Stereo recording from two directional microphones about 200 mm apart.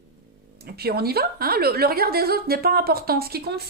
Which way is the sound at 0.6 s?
50° right (ahead or behind).